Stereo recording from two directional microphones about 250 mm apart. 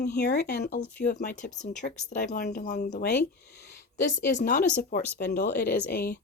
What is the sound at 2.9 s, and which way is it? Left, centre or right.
Speech, left.